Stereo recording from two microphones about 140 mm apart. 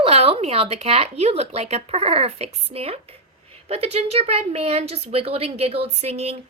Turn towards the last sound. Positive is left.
turn(degrees=-50)  # may be behind; listen again after turning